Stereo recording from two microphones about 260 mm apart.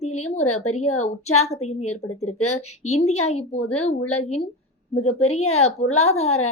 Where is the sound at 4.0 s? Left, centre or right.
Left.